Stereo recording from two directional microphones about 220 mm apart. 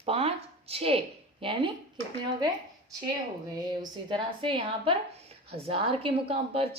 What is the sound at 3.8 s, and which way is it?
A woman's voice, 20° right (ahead or behind).